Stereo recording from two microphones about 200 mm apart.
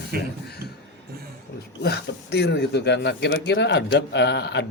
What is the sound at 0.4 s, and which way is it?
A man's voice, 55° left (ahead or behind).